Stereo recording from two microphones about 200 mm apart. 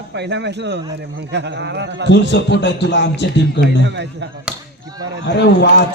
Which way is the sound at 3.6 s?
60° right (ahead or behind).